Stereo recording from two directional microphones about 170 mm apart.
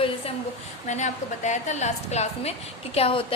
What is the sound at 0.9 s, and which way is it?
A woman's voice, 45° left (ahead or behind).